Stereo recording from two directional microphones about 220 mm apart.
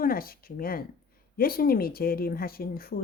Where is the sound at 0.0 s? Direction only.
40° left (ahead or behind).